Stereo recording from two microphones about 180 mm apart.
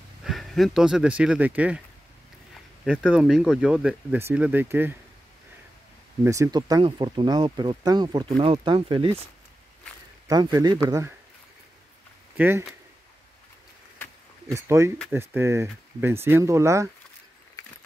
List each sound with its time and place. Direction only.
0.2 s speech: centre (ahead or behind)
2.8 s speech: centre (ahead or behind)
6.2 s speech: 15° right (ahead or behind)
10.2 s speech: 20° right (ahead or behind)
12.4 s speech: 10° right (ahead or behind)
14.5 s speech: 15° right (ahead or behind)